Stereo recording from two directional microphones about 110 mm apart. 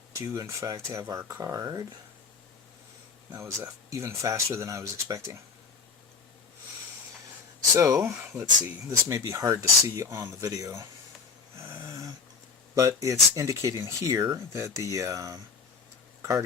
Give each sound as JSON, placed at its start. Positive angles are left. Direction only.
{"t": 0.2, "sound": "speech", "side_deg": -30}
{"t": 3.3, "sound": "speech", "side_deg": -25}
{"t": 7.8, "sound": "speech", "side_deg": -35}
{"t": 8.3, "sound": "speech", "side_deg": -20}
{"t": 11.5, "sound": "a sound", "side_deg": -25}
{"t": 12.7, "sound": "speech", "side_deg": -30}